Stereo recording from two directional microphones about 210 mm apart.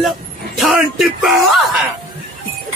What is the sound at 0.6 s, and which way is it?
Speech, centre (ahead or behind).